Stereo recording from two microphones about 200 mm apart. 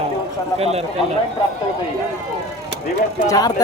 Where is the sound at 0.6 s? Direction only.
30° right (ahead or behind).